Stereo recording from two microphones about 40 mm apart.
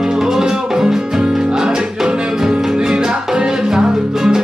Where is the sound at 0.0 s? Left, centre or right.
Centre.